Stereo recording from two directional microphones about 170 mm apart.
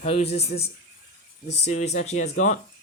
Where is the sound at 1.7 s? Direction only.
45° left (ahead or behind).